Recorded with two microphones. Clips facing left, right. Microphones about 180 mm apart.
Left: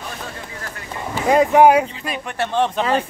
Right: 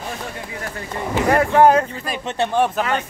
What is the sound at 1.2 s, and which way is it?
Speech, 15° left (ahead or behind).